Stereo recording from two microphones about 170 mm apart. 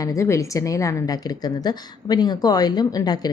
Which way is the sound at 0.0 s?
20° left (ahead or behind).